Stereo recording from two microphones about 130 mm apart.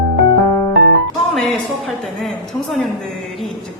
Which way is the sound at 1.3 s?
Centre (ahead or behind).